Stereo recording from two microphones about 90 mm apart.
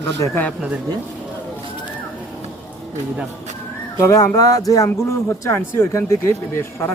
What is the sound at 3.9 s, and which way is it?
Speech, 40° left (ahead or behind).